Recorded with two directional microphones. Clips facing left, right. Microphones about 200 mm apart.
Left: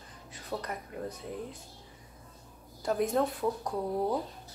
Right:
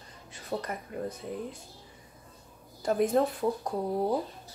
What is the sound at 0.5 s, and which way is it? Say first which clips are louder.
Speech: right 3 dB; 25° right (ahead or behind).